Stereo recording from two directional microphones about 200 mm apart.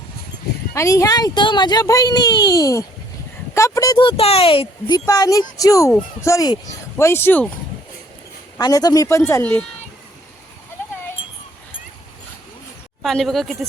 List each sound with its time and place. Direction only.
0.7 s speech: 15° left (ahead or behind)
8.5 s speech: 20° left (ahead or behind)
13.0 s a woman's voice: centre (ahead or behind)